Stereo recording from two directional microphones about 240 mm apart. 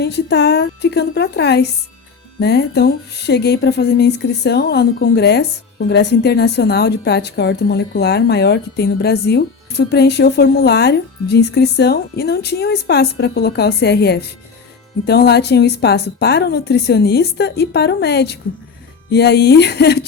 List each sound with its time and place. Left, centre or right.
0.0 s speech: left